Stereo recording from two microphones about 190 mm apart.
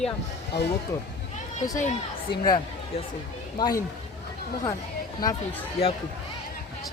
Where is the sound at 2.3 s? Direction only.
60° left (ahead or behind).